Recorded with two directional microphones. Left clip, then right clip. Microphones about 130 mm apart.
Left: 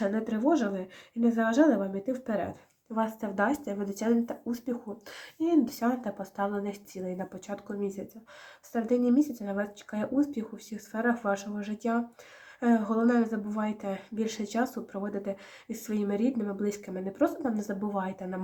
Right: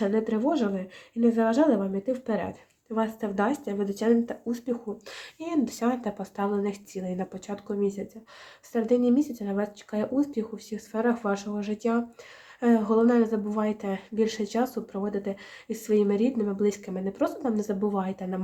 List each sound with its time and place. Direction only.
0.0 s speech: 30° right (ahead or behind)
10.9 s speech: 40° right (ahead or behind)